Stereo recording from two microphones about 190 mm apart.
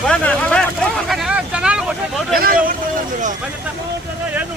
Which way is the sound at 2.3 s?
50° right (ahead or behind).